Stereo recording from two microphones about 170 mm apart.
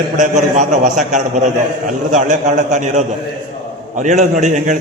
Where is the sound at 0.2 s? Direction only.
45° right (ahead or behind).